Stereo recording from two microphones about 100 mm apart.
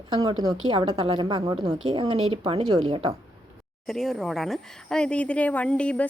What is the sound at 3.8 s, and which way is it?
Speech, centre (ahead or behind).